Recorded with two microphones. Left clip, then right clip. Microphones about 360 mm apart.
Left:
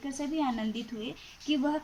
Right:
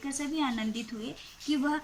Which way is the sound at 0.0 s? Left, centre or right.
Centre.